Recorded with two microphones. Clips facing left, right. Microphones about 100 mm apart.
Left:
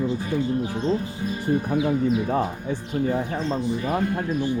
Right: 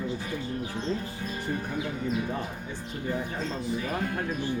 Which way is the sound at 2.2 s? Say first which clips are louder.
Left 9 dB; 70° left (ahead or behind).